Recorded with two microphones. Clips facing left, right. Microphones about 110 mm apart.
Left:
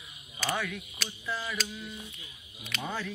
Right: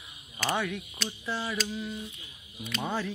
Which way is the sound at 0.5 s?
25° right (ahead or behind).